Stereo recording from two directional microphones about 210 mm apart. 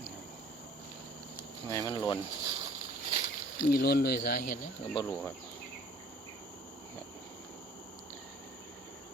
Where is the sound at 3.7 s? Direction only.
50° left (ahead or behind).